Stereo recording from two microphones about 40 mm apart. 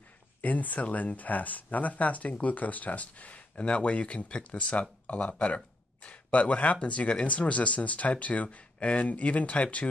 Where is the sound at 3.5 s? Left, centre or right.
Left.